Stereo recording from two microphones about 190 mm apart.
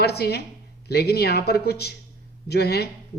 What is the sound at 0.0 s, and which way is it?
A woman's voice, 60° left (ahead or behind).